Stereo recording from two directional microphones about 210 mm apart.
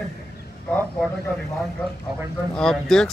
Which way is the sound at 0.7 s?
5° left (ahead or behind).